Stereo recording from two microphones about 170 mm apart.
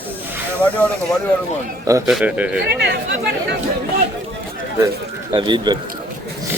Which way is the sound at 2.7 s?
75° right (ahead or behind).